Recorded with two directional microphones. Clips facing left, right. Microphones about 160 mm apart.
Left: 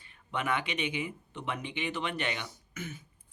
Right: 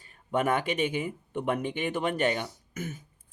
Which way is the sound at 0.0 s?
45° right (ahead or behind).